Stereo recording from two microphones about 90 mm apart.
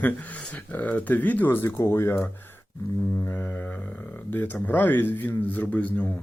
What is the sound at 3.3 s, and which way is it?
Speech, 20° left (ahead or behind).